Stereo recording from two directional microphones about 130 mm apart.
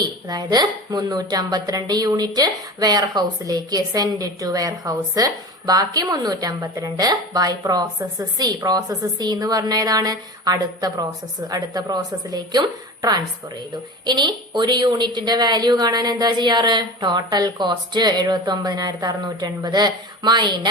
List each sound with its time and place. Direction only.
0.0 s a woman's voice: 30° right (ahead or behind)